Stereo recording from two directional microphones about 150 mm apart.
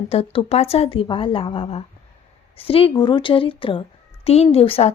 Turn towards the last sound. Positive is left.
turn(degrees=40)  # may be behind; listen again after turning